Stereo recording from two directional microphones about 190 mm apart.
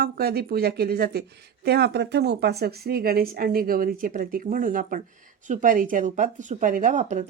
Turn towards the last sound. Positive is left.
turn(degrees=-40)  # may be behind; listen again after turning